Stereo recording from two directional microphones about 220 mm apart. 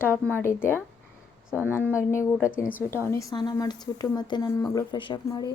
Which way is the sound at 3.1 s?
15° left (ahead or behind).